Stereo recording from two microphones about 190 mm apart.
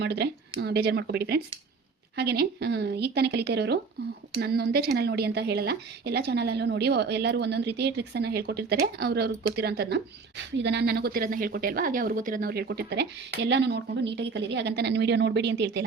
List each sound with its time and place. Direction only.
0.0 s speech: 60° right (ahead or behind)